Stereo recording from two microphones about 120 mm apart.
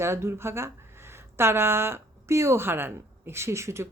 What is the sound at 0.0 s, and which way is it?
Speech, 20° right (ahead or behind).